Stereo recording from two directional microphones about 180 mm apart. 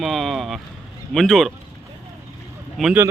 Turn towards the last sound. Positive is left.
turn(degrees=0)  # may be behind; listen again after turning